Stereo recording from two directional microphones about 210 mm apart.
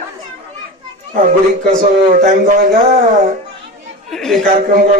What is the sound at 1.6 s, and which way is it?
Speech, 40° right (ahead or behind).